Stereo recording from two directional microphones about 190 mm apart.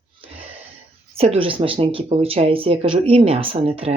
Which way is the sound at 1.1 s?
30° right (ahead or behind).